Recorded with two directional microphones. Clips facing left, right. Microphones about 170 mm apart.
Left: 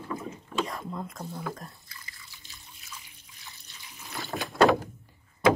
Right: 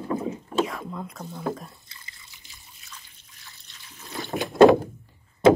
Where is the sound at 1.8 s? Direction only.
25° right (ahead or behind).